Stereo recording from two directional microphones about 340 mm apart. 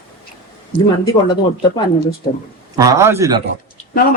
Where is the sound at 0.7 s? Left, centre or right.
Centre.